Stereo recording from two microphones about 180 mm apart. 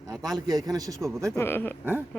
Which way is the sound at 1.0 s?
Centre (ahead or behind).